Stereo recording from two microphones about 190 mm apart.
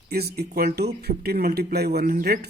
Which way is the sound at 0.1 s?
55° right (ahead or behind).